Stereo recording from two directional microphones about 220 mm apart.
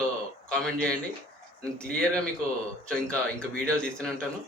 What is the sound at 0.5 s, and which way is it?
Speech, 5° left (ahead or behind).